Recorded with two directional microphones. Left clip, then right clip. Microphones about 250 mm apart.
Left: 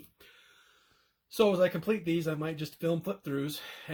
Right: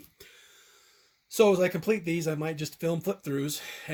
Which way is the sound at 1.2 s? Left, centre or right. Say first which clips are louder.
Right 3 dB; right.